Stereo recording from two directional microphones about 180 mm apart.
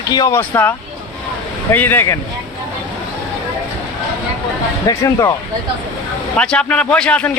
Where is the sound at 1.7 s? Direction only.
10° left (ahead or behind).